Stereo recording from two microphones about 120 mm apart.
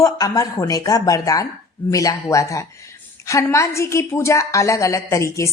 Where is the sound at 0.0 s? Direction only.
30° left (ahead or behind).